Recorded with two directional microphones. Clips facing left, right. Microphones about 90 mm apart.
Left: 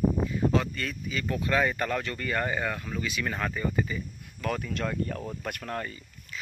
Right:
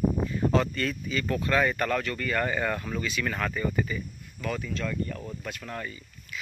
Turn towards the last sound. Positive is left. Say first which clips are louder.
# right 1 dB
turn(degrees=40)  # may be behind; listen again after turning